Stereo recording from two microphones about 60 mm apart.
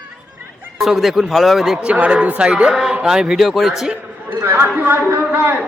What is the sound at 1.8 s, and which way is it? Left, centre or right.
A man's voice, centre.